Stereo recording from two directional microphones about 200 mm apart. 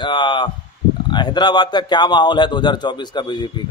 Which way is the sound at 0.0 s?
25° left (ahead or behind).